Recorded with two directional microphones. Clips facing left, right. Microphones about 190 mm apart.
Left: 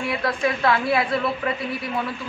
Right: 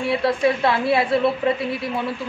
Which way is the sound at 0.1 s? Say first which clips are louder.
Right 6 dB; 25° right (ahead or behind).